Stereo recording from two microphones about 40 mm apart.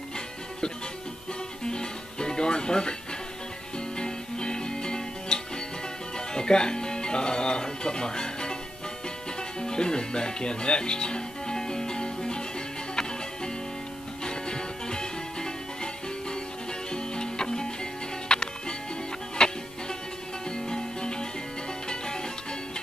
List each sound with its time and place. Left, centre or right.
1.7 s music: left
4.0 s music: centre
9.6 s music: left
14.2 s music: centre